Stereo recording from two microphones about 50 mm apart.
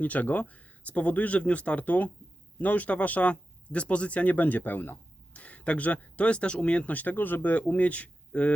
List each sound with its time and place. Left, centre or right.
0.0 s speech: left